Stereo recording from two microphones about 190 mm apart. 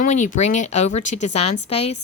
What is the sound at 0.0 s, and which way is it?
A woman's voice, 40° left (ahead or behind).